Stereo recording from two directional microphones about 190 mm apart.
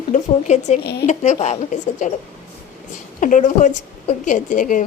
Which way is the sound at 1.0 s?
40° left (ahead or behind).